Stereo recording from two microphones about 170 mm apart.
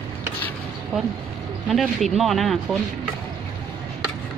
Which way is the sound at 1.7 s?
Centre (ahead or behind).